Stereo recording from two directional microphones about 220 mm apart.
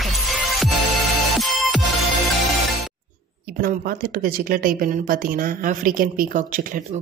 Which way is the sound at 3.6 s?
40° right (ahead or behind).